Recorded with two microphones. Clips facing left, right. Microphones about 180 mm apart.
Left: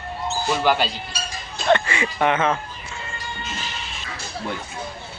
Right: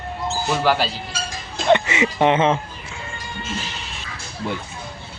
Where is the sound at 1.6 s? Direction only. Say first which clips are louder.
Right 3 dB; 20° right (ahead or behind).